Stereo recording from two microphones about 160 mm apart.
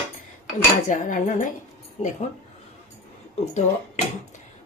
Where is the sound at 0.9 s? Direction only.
55° left (ahead or behind).